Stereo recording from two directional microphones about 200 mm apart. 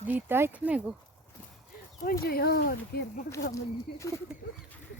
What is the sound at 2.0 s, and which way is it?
Speech, 45° left (ahead or behind).